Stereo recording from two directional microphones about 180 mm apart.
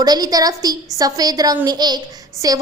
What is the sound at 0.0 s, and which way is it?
A woman's voice, 20° right (ahead or behind).